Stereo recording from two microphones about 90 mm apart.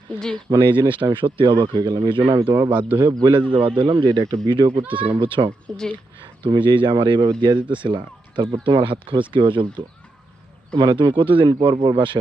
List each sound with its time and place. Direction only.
0.5 s a man's voice: 60° right (ahead or behind)
2.7 s a man's voice: 20° right (ahead or behind)
3.1 s a man's voice: 50° right (ahead or behind)
3.5 s speech: 70° right (ahead or behind)
4.9 s speech: 70° right (ahead or behind)
5.7 s speech: 5° left (ahead or behind)
6.4 s speech: 60° right (ahead or behind)